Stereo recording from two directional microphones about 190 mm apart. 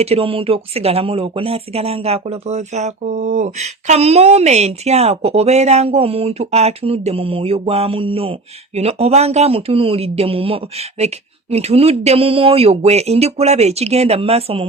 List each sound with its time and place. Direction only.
0.0 s speech: 30° right (ahead or behind)